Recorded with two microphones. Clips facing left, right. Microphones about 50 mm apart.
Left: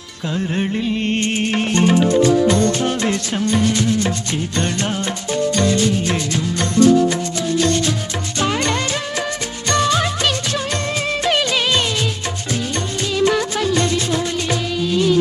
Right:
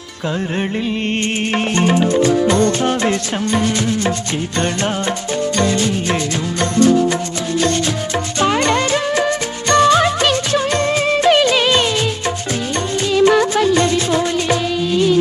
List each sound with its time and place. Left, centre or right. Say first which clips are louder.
0.5 s music: right 1 dB; right
8.4 s music: right 4 dB; right
13.1 s music: right 5 dB; right